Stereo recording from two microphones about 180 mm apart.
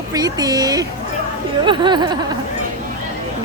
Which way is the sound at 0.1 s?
20° right (ahead or behind).